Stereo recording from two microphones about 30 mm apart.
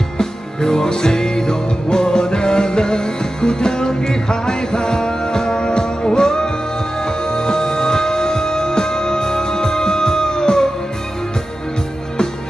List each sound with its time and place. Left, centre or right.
0.2 s music: centre